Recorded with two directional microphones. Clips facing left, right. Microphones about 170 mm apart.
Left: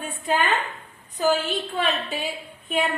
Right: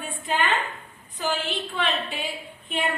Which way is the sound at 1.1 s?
40° left (ahead or behind).